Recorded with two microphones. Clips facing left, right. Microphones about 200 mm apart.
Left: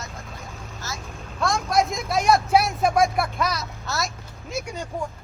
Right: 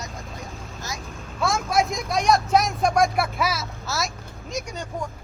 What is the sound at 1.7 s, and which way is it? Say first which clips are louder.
Speech: left 1 dB; centre (ahead or behind).